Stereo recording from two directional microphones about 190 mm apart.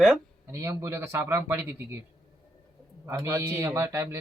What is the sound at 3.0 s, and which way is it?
A man's voice, 15° right (ahead or behind).